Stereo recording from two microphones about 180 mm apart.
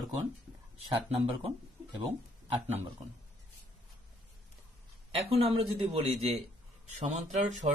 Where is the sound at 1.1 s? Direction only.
35° right (ahead or behind).